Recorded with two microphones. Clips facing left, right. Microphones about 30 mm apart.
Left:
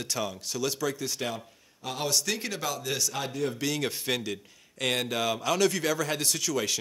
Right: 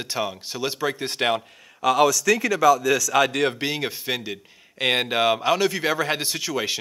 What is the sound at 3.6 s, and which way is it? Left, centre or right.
Speech, right.